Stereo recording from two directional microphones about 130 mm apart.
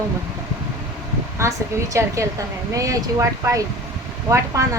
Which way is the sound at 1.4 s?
25° right (ahead or behind).